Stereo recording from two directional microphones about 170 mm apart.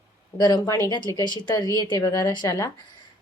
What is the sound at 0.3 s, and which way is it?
A woman's voice, 25° left (ahead or behind).